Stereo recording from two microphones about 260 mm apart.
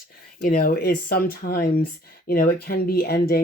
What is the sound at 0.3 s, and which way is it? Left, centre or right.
Speech, left.